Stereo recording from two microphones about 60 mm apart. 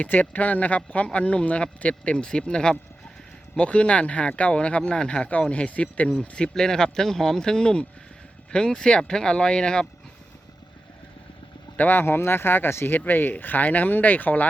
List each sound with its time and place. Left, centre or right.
0.0 s speech: left
11.8 s speech: left